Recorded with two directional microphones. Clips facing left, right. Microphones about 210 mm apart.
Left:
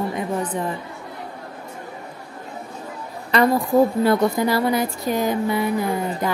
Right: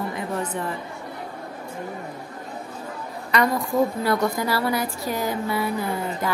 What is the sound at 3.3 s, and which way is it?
A woman's voice, 30° left (ahead or behind).